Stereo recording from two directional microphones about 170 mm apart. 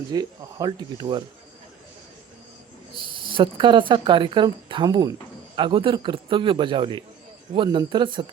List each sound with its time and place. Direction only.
0.1 s speech: 25° right (ahead or behind)
3.1 s speech: 30° right (ahead or behind)